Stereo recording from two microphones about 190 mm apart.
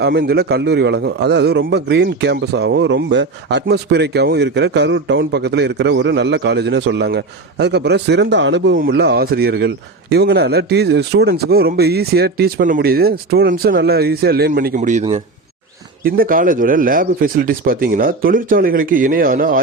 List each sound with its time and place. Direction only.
0.0 s a man's voice: 60° right (ahead or behind); by 15.0 s 40° right (ahead or behind)
16.0 s speech: 50° right (ahead or behind)